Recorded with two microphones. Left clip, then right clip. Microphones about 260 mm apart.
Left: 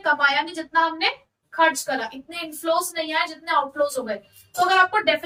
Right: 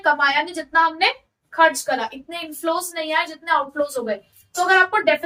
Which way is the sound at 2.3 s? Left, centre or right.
Centre.